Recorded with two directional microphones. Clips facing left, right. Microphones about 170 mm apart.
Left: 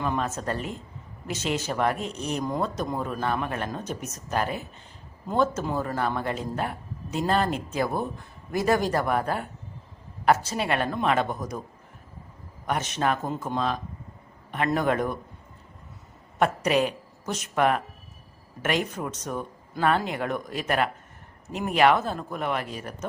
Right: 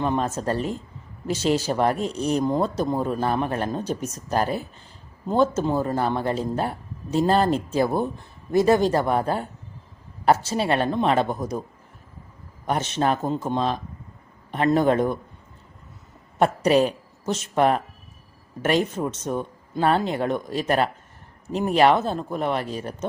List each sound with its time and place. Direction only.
0.0 s speech: 30° right (ahead or behind)
12.6 s speech: 30° right (ahead or behind)
16.4 s a woman's voice: 35° right (ahead or behind)